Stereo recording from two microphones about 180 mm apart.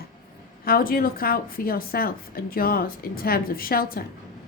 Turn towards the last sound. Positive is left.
turn(degrees=55)  # may be behind; listen again after turning